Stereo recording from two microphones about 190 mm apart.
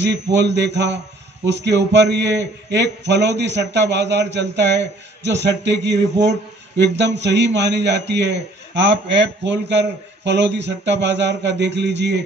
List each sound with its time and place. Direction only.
0.0 s a man's voice: 65° right (ahead or behind)
7.2 s a man's voice: 65° right (ahead or behind)